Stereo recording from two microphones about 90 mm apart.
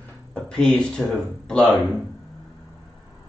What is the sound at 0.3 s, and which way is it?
A man's voice, 5° left (ahead or behind).